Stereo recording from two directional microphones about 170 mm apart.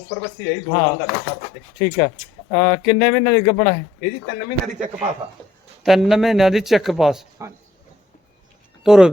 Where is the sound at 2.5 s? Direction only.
15° left (ahead or behind).